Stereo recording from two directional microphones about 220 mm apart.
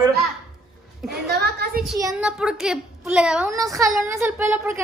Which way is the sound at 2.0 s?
10° right (ahead or behind).